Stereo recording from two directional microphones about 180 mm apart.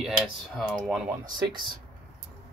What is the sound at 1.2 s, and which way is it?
Speech, 25° right (ahead or behind).